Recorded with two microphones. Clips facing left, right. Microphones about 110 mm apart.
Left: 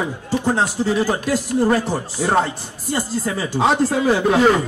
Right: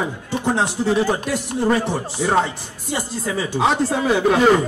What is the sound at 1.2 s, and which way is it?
Speech, centre (ahead or behind).